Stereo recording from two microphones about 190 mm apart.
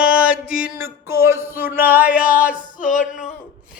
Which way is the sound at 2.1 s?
45° left (ahead or behind).